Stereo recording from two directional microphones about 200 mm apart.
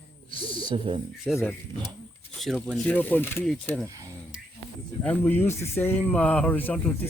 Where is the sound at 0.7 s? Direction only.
30° right (ahead or behind).